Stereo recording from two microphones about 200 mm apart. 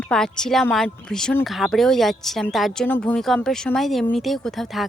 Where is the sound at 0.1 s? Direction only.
5° left (ahead or behind).